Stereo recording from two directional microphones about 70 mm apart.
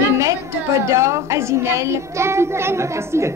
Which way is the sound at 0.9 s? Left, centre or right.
Right.